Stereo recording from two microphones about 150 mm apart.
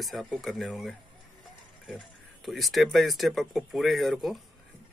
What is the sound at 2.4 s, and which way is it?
Speech, centre (ahead or behind).